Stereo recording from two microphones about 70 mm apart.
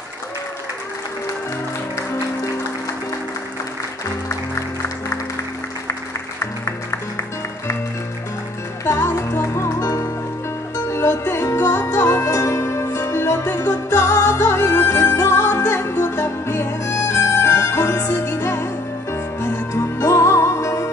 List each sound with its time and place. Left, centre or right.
6.4 s music: left
8.8 s music: left